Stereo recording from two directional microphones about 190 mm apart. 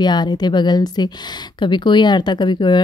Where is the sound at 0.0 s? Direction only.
20° left (ahead or behind).